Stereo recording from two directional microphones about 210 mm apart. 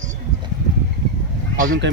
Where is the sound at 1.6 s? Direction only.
70° right (ahead or behind).